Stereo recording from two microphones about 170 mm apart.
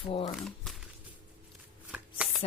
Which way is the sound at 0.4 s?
Centre (ahead or behind).